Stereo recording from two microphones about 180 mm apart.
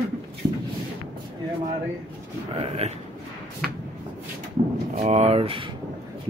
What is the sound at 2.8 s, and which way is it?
Speech, 35° right (ahead or behind).